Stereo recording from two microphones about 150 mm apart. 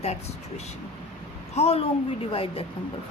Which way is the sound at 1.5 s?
40° left (ahead or behind).